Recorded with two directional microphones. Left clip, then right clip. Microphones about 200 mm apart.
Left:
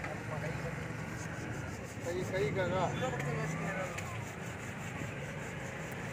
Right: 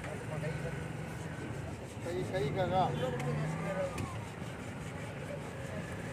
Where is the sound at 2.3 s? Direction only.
25° right (ahead or behind).